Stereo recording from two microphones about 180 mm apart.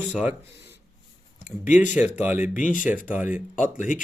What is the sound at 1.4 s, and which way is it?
A man's voice, 10° right (ahead or behind).